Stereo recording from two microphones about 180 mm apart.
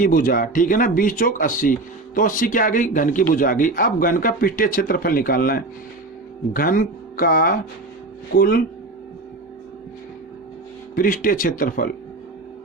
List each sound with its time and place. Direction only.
0.0 s speech: 50° left (ahead or behind)
10.9 s speech: 50° left (ahead or behind)